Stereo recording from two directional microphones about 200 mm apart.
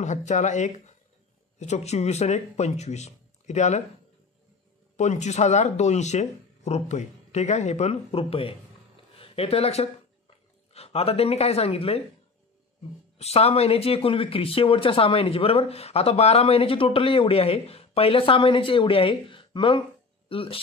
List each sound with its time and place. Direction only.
0.0 s speech: 35° left (ahead or behind)
4.9 s speech: 35° left (ahead or behind)
13.2 s speech: 30° left (ahead or behind)